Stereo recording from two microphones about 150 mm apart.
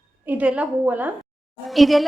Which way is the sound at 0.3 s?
10° right (ahead or behind).